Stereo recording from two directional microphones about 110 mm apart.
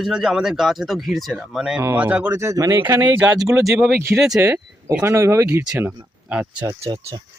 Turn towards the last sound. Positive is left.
turn(degrees=-15)  # may be behind; listen again after turning